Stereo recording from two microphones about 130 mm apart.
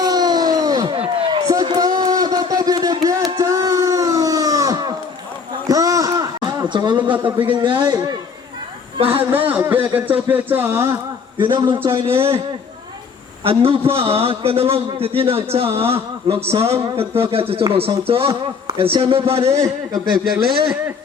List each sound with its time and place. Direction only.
0.0 s a sound: 30° right (ahead or behind)
0.9 s a sound: 45° right (ahead or behind)
1.5 s a sound: 30° right (ahead or behind)
7.1 s music: 10° right (ahead or behind)
7.3 s a man's voice: 40° right (ahead or behind)
9.0 s speech: 45° right (ahead or behind)
9.5 s music: 15° right (ahead or behind)
11.3 s a man's voice: 35° right (ahead or behind)
13.5 s a man's voice: 45° right (ahead or behind)
19.5 s a man's voice: 25° right (ahead or behind)